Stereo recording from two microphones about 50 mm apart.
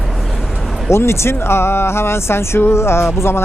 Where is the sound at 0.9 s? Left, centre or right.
Left.